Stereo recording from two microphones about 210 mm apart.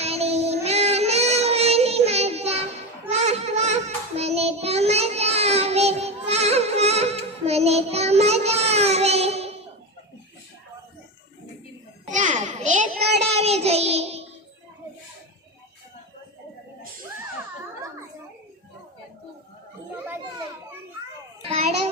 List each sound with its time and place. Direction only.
0.0 s child singing: 30° right (ahead or behind)
12.0 s a sound: 35° right (ahead or behind)
13.3 s child singing: 30° right (ahead or behind)
21.5 s children playing: 30° right (ahead or behind)